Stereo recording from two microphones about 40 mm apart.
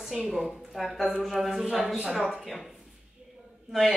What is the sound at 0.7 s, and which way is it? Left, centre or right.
A woman's voice, centre.